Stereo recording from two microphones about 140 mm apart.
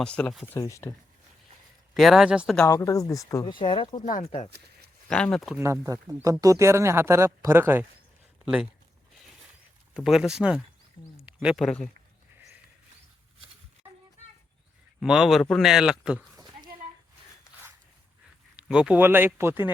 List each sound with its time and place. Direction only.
0.0 s a man's voice: 5° left (ahead or behind)
0.4 s speech: 20° left (ahead or behind)
1.9 s a man's voice: centre (ahead or behind)
2.6 s speech: 25° left (ahead or behind)
4.0 s speech: 55° left (ahead or behind)
5.0 s a man's voice: 5° left (ahead or behind)
5.5 s speech: 20° right (ahead or behind)
9.9 s a man's voice: 5° right (ahead or behind)
11.2 s a sound: 10° right (ahead or behind)
11.5 s a man's voice: 5° left (ahead or behind)
15.0 s a man's voice: 5° right (ahead or behind)
18.5 s speech: 5° right (ahead or behind)